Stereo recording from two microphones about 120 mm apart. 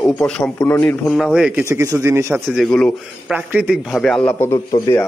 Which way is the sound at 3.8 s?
Centre (ahead or behind).